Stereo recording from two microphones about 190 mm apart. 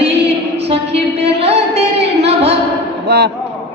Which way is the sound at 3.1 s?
60° right (ahead or behind).